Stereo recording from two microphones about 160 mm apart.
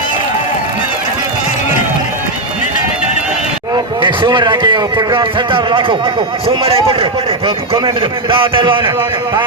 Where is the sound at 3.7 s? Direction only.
30° right (ahead or behind).